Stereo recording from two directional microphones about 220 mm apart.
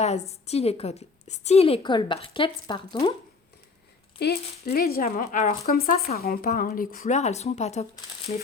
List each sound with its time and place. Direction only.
0.0 s a woman's voice: 30° left (ahead or behind)
4.2 s speech: 45° left (ahead or behind)